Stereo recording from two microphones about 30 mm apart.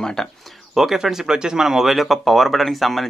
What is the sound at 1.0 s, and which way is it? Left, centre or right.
Speech, right.